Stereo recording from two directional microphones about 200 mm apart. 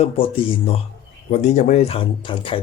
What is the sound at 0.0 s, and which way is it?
Speech, 30° left (ahead or behind).